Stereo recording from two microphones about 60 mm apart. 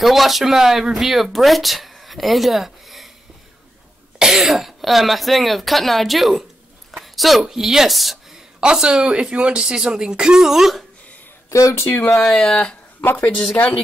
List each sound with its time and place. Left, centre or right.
0.0 s speech: centre
4.2 s speech: centre
8.5 s speech: centre
11.7 s speech: left
12.2 s speech: centre
13.0 s a woman's voice: left